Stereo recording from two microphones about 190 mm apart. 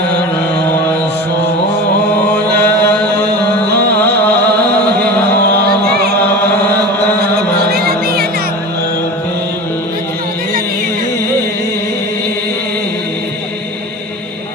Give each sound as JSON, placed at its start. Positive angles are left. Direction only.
{"t": 2.6, "sound": "chant", "side_deg": 10}
{"t": 4.0, "sound": "music", "side_deg": 10}
{"t": 5.8, "sound": "a sound", "side_deg": -60}
{"t": 6.7, "sound": "music", "side_deg": -55}